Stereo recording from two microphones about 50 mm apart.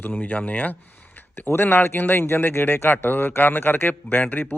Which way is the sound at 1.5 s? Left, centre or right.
Left.